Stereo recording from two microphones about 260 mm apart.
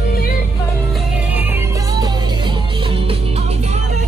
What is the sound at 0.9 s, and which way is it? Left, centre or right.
Music, centre.